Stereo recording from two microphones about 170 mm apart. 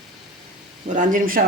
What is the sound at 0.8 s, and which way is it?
Speech, 50° right (ahead or behind).